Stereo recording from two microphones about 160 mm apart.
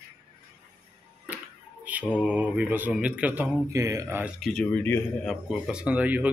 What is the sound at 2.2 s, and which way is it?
Speech, 10° right (ahead or behind).